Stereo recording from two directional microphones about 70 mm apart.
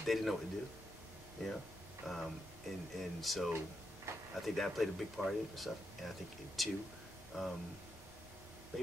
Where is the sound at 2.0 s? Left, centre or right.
Centre.